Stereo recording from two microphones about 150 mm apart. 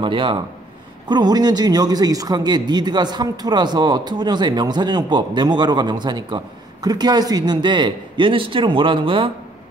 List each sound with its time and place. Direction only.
0.0 s a man's voice: 35° right (ahead or behind)